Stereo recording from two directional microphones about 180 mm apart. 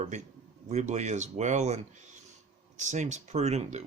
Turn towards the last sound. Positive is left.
turn(degrees=-40)  # may be behind; listen again after turning